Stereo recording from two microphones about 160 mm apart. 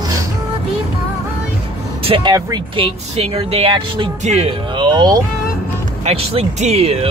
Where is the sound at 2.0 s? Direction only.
30° right (ahead or behind).